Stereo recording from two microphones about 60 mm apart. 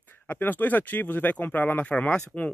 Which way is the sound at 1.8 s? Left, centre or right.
Left.